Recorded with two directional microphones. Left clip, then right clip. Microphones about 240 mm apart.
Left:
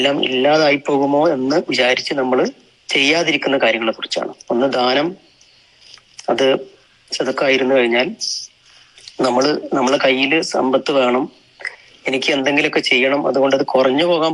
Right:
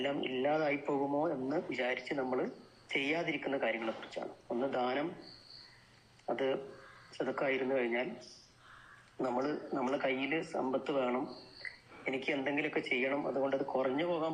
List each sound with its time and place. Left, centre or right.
0.0 s speech: left
6.2 s speech: left